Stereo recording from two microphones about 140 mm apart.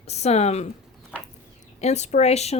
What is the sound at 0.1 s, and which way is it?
Speech, 50° left (ahead or behind).